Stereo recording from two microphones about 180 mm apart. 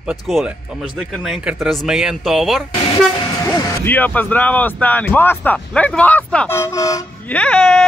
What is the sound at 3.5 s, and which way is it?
Speech, 10° left (ahead or behind).